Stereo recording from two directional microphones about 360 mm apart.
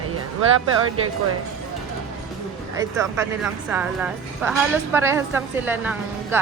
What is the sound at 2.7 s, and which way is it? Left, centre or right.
A woman's voice, centre.